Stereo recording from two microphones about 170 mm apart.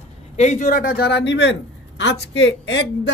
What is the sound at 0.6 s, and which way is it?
A woman's voice, 60° left (ahead or behind).